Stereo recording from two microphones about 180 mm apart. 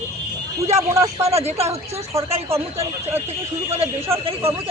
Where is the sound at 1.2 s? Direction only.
35° right (ahead or behind).